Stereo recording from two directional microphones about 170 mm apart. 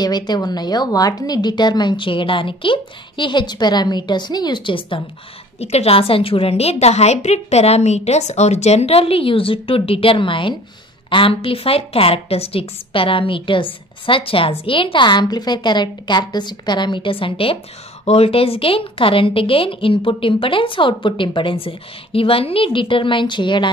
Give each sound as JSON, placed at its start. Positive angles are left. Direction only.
{"t": 0.0, "sound": "a woman's voice", "side_deg": 25}